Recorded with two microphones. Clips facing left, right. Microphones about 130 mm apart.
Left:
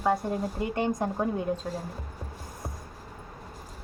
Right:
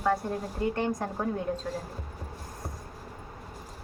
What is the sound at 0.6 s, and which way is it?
Speech, 15° left (ahead or behind).